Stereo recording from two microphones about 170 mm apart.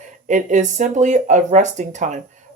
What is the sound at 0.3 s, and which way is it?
Speech, 45° right (ahead or behind).